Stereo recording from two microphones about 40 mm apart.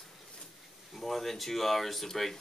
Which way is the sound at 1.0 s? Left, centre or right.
Centre.